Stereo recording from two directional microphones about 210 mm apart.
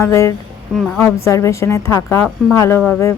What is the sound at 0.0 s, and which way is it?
A woman's voice, 15° left (ahead or behind).